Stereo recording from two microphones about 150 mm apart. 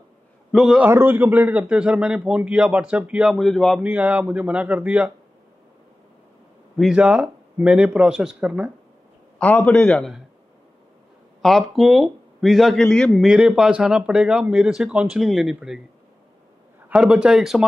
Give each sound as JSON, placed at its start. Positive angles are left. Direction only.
{"t": 0.5, "sound": "a man's voice", "side_deg": 0}
{"t": 0.8, "sound": "a man's voice", "side_deg": -15}
{"t": 3.8, "sound": "a man's voice", "side_deg": -10}
{"t": 6.8, "sound": "a man's voice", "side_deg": -5}
{"t": 9.4, "sound": "a man's voice", "side_deg": 10}
{"t": 11.4, "sound": "a man's voice", "side_deg": 0}
{"t": 16.9, "sound": "a man's voice", "side_deg": -5}